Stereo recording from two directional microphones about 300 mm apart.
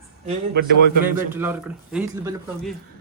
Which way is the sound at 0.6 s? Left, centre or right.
Right.